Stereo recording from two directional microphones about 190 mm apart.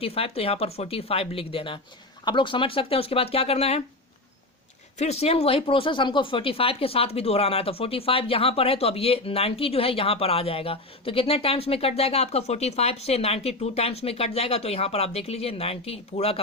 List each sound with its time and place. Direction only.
0.0 s speech: 30° left (ahead or behind)
4.9 s speech: 35° left (ahead or behind)